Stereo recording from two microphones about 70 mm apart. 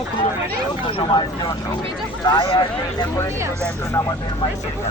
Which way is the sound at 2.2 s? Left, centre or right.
Left.